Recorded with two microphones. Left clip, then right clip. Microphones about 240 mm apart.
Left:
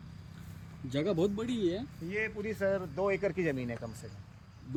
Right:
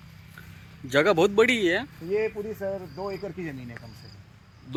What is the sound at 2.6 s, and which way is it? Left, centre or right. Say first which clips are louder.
Speech: left 1 dB; centre.